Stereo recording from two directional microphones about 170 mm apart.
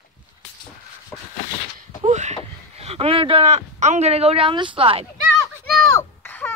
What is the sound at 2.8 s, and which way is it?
Speech, 35° right (ahead or behind).